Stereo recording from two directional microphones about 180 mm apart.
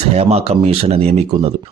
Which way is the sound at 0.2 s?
35° right (ahead or behind).